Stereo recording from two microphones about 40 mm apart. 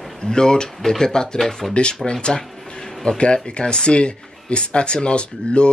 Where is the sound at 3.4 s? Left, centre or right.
Left.